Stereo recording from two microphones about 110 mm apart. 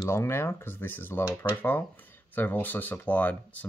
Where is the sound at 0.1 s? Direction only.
20° left (ahead or behind).